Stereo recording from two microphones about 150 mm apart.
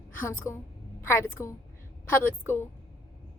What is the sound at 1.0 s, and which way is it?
A woman's voice, 15° left (ahead or behind).